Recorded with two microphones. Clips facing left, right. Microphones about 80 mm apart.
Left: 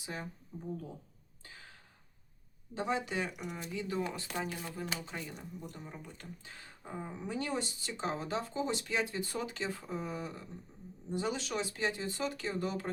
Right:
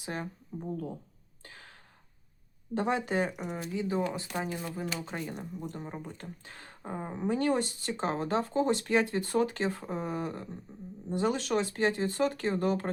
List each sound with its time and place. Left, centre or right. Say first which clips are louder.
0.0 s speech: right 5 dB; right
1.4 s gasp: right 3 dB; right
2.7 s speech: right 5 dB; right
3.6 s speech: right 5 dB; right
5.0 s speech: right 6 dB; right